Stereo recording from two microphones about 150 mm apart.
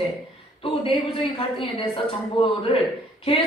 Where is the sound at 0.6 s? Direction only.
35° left (ahead or behind).